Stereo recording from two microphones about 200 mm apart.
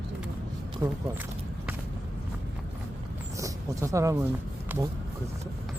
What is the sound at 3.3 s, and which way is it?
Speech, 15° right (ahead or behind).